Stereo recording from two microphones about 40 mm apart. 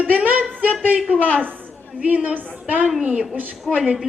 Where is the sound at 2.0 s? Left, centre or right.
Right.